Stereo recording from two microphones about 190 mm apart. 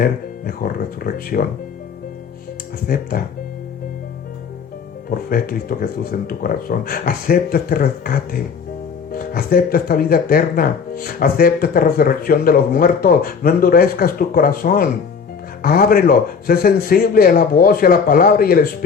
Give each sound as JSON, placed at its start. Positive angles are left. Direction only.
{"t": 0.0, "sound": "speech", "side_deg": 50}
{"t": 2.8, "sound": "speech", "side_deg": 50}
{"t": 5.0, "sound": "speech", "side_deg": 50}